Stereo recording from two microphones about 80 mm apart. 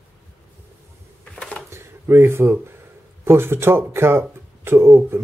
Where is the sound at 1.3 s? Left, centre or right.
Centre.